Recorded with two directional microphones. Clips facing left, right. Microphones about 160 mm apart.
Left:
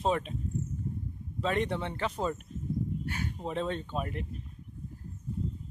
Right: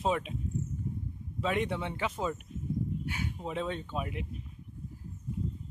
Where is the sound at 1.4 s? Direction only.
10° right (ahead or behind).